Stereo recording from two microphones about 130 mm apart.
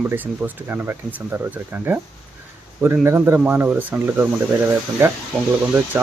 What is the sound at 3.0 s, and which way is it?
A man's voice, 20° right (ahead or behind).